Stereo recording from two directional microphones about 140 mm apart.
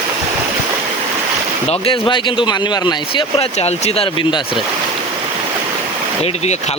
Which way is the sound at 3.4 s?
50° left (ahead or behind).